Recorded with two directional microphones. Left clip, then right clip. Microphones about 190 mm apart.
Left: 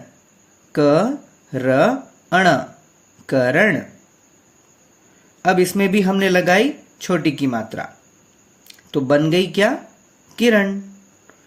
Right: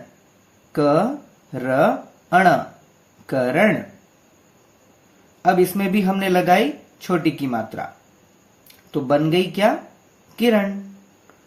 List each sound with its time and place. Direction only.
0.7 s speech: 45° left (ahead or behind)
5.5 s speech: 50° left (ahead or behind)